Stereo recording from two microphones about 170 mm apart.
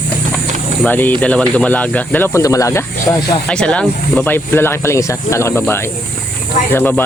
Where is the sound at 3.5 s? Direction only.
5° left (ahead or behind).